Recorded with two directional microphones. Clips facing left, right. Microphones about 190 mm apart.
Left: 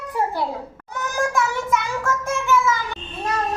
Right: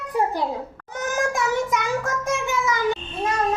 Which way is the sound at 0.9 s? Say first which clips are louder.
Left 1 dB; 20° right (ahead or behind).